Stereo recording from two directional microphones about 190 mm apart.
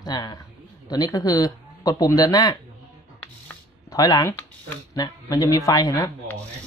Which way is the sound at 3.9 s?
20° left (ahead or behind).